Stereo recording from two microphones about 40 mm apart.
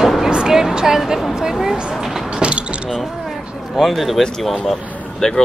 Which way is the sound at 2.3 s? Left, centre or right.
Right.